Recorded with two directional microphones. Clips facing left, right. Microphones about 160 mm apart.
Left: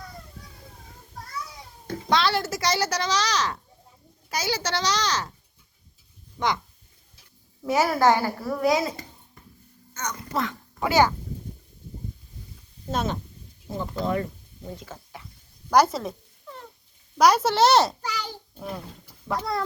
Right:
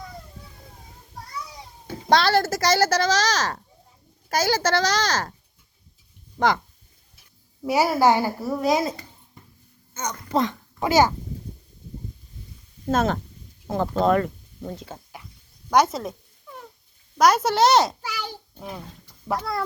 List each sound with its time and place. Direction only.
2.0 s speech: 40° right (ahead or behind)
7.6 s a child's voice: 15° right (ahead or behind)
10.3 s a child's voice: 25° right (ahead or behind)
12.9 s speech: 45° right (ahead or behind)
13.7 s speech: 85° right; by 14.7 s 70° right (ahead or behind)
14.8 s a sound: 30° right (ahead or behind)
15.7 s cat: centre (ahead or behind)
17.2 s speech: centre (ahead or behind)
18.0 s a sound: 10° right (ahead or behind)